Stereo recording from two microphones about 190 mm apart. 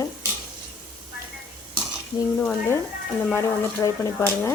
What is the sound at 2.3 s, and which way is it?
Speech, 5° left (ahead or behind).